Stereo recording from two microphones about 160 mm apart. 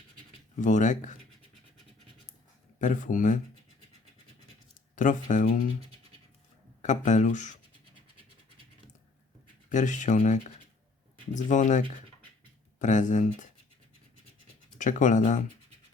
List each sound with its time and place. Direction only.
0.6 s speech: 50° left (ahead or behind)
2.7 s speech: 50° left (ahead or behind)
4.9 s speech: 55° left (ahead or behind)
6.8 s speech: 50° left (ahead or behind)
9.6 s speech: 50° left (ahead or behind)
14.8 s speech: 50° left (ahead or behind)